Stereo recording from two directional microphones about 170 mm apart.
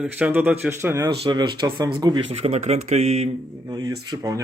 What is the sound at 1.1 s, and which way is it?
Speech, 30° right (ahead or behind).